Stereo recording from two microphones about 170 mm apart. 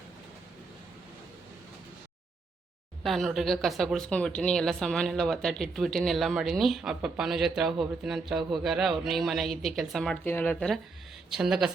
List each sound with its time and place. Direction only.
3.0 s speech: centre (ahead or behind)